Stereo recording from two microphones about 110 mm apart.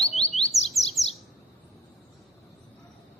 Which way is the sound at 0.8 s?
30° left (ahead or behind).